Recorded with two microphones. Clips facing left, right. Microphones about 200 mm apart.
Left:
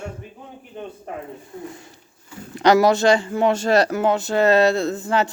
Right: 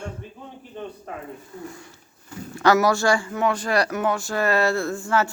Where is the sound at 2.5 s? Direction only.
20° left (ahead or behind).